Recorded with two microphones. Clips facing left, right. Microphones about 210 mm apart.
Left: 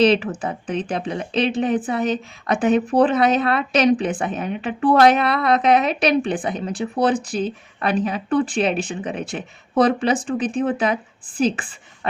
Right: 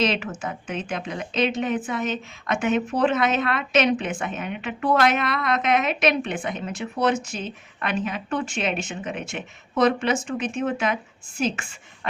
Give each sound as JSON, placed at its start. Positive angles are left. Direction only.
{"t": 0.0, "sound": "speech", "side_deg": 35}